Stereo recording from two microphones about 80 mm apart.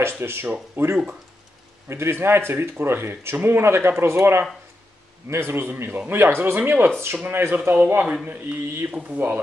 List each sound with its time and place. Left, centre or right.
0.2 s a man's voice: right